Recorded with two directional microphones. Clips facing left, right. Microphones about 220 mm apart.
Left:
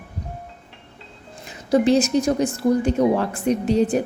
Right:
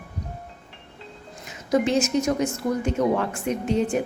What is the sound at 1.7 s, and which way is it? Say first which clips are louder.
A woman's voice: left 4 dB; 35° left (ahead or behind).